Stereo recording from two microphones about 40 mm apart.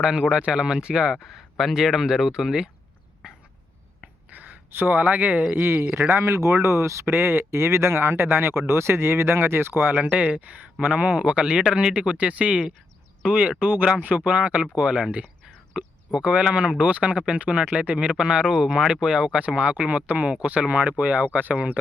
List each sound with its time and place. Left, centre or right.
0.0 s speech: right
1.1 s speech: centre
4.3 s a sound: right
5.0 s speech: right
5.6 s a man's voice: right
7.0 s speech: right
10.0 s speech: right
11.2 s speech: right
18.2 s speech: right